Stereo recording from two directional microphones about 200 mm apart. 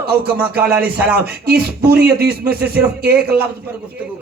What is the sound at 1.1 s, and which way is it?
Speech, 50° right (ahead or behind).